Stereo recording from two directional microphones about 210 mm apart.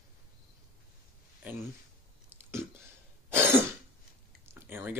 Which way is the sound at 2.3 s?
10° right (ahead or behind).